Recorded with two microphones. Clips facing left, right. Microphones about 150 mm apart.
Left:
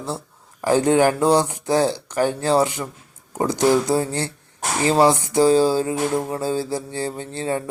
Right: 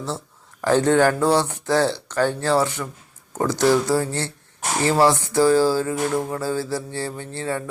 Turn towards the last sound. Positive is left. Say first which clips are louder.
# left 2 dB
turn(degrees=20)  # may be behind; listen again after turning